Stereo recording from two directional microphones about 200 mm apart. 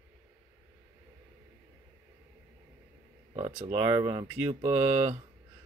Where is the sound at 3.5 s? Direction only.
25° right (ahead or behind).